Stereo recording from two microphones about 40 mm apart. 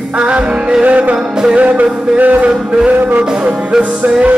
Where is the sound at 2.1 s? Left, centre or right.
Right.